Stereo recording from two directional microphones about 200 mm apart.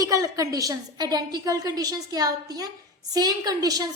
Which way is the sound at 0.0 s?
15° right (ahead or behind).